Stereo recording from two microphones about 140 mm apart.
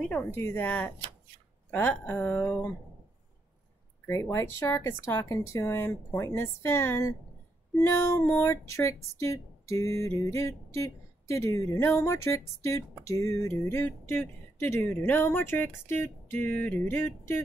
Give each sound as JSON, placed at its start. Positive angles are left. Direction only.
{"t": 0.1, "sound": "speech", "side_deg": 20}
{"t": 4.1, "sound": "speech", "side_deg": 20}